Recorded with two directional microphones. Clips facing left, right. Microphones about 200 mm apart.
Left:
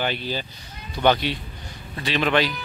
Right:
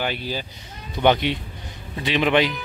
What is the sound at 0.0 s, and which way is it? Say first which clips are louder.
A man's voice: even; 10° right (ahead or behind).